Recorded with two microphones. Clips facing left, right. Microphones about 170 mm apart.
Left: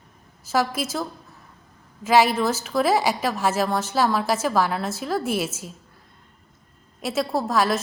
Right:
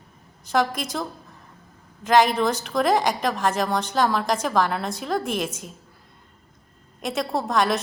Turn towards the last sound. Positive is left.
turn(degrees=0)  # may be behind; listen again after turning